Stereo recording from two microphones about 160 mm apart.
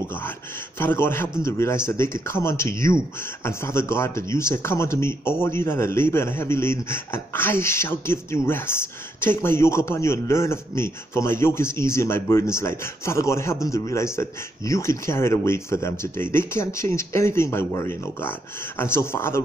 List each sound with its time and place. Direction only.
0.7 s speech: 15° left (ahead or behind)